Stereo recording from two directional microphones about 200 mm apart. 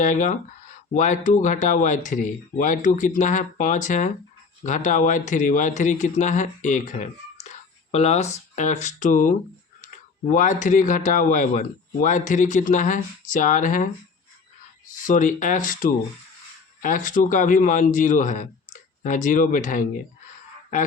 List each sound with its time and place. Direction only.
0.0 s a man's voice: 40° left (ahead or behind)
15.0 s a man's voice: 40° left (ahead or behind)